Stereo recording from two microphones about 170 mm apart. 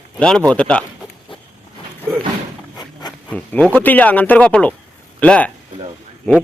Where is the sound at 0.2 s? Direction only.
5° left (ahead or behind).